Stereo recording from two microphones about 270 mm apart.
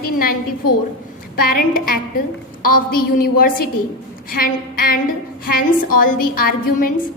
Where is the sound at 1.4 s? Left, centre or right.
Left.